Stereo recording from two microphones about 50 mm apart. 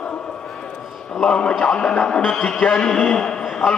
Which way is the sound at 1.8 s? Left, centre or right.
Centre.